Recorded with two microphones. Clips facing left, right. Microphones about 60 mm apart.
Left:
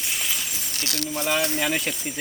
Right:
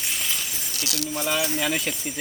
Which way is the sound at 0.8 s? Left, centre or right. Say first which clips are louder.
Even; left.